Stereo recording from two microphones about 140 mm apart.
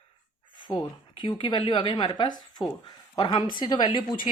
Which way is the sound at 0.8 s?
35° left (ahead or behind).